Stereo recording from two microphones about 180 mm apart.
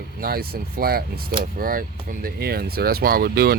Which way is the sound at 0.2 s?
55° right (ahead or behind).